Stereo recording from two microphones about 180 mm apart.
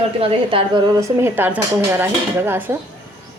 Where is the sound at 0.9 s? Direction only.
15° right (ahead or behind).